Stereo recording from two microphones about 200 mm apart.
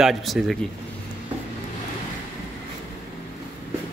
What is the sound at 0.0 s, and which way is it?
Speech, centre (ahead or behind).